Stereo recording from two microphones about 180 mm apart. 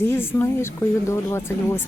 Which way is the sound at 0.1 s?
15° left (ahead or behind).